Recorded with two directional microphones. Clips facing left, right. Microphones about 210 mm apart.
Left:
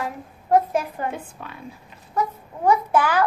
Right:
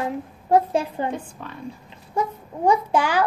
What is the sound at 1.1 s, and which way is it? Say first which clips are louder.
Speech: right 3 dB; 5° left (ahead or behind).